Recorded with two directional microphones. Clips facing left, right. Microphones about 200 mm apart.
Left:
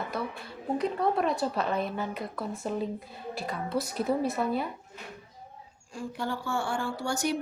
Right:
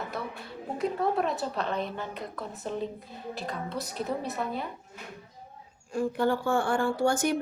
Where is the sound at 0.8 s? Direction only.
5° right (ahead or behind).